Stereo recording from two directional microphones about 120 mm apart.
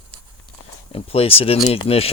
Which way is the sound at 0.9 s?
55° left (ahead or behind).